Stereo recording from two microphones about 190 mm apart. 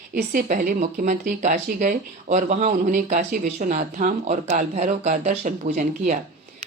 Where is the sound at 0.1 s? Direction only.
45° right (ahead or behind).